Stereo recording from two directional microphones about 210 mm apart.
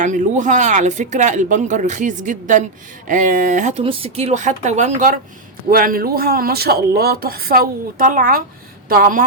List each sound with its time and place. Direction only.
0.0 s speech: 35° right (ahead or behind)